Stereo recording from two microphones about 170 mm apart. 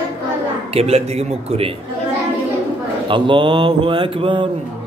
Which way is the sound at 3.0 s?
30° right (ahead or behind).